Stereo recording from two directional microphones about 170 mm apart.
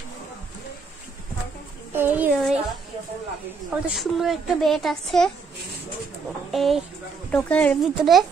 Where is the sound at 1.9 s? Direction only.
10° right (ahead or behind).